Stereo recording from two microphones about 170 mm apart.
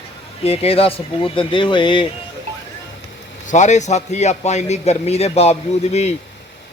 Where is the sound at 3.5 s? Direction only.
45° left (ahead or behind).